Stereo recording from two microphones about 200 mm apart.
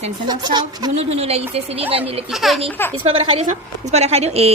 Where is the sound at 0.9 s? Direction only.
30° right (ahead or behind).